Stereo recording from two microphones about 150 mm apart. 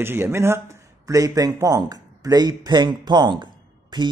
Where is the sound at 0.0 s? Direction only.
15° right (ahead or behind).